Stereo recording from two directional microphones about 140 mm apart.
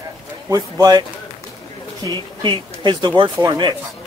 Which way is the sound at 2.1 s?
35° right (ahead or behind).